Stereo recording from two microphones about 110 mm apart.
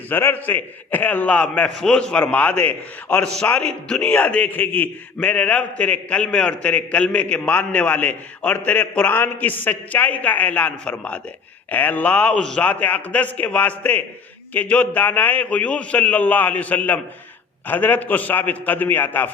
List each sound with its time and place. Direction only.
0.1 s a man's voice: 20° left (ahead or behind)